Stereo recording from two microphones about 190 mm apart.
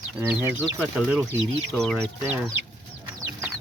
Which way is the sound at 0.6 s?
5° left (ahead or behind).